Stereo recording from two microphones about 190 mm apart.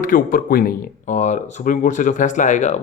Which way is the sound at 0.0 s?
45° left (ahead or behind).